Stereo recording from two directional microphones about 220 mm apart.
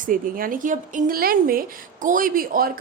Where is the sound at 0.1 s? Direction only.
40° right (ahead or behind).